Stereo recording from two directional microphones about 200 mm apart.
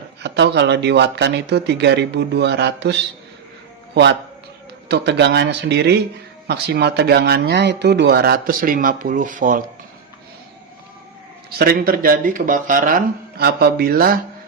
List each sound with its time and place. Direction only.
0.2 s speech: 55° right (ahead or behind)
4.9 s speech: 55° right (ahead or behind)
11.5 s speech: 50° right (ahead or behind)